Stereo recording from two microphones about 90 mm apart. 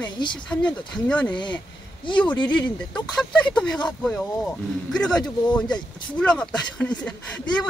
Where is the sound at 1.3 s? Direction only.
60° left (ahead or behind).